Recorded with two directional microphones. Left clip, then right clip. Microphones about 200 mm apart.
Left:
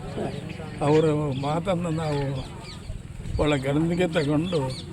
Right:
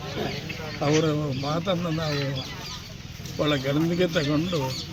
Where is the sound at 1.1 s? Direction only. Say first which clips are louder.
Left 1 dB; 20° left (ahead or behind).